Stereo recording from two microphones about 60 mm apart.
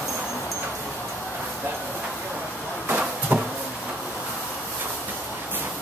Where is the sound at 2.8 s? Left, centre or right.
Right.